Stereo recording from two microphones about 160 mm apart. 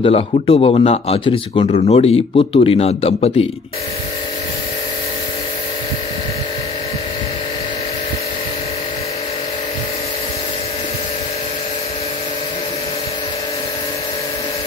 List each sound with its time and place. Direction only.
0.0 s a man's voice: 35° left (ahead or behind)
1.7 s a man's voice: 40° left (ahead or behind)